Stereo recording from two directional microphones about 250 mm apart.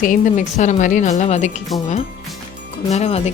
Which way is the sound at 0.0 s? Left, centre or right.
Left.